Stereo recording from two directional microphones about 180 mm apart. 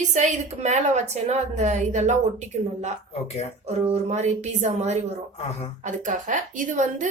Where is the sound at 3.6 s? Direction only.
40° right (ahead or behind).